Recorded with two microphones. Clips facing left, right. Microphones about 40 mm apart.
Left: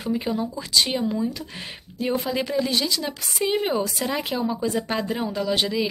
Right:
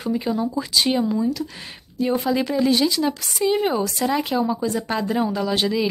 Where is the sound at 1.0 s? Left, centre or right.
Centre.